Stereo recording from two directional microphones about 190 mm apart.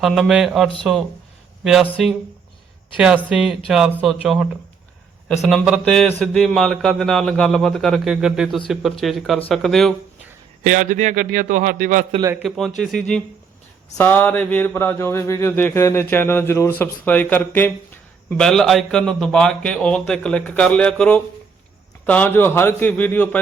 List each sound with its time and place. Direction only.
0.0 s a man's voice: centre (ahead or behind)
10.7 s a man's voice: 40° right (ahead or behind)
12.4 s a man's voice: centre (ahead or behind)
14.0 s a sound: 10° left (ahead or behind)